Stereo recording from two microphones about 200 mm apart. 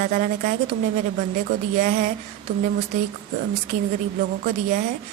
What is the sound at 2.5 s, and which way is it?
Speech, 55° right (ahead or behind).